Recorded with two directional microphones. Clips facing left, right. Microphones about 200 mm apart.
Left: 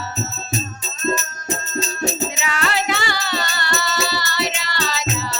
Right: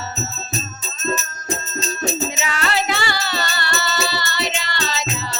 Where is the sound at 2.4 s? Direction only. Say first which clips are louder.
Even; 30° right (ahead or behind).